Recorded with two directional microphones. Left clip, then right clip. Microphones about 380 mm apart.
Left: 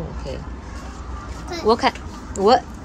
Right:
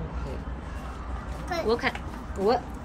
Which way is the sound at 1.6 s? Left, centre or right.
Centre.